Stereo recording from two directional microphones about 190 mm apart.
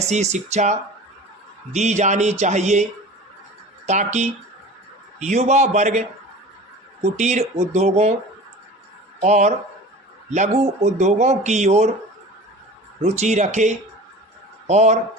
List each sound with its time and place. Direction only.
0.0 s speech: 35° right (ahead or behind)
3.8 s speech: 35° right (ahead or behind)
9.2 s speech: 35° right (ahead or behind)
13.0 s speech: 35° right (ahead or behind)